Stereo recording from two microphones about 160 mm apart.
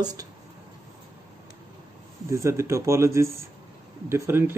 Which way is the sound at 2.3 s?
20° right (ahead or behind).